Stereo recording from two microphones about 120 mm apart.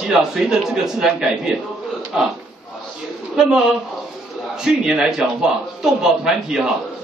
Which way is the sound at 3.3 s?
5° right (ahead or behind).